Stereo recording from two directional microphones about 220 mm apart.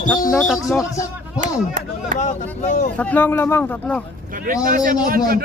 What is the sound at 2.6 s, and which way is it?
Speech, 35° left (ahead or behind).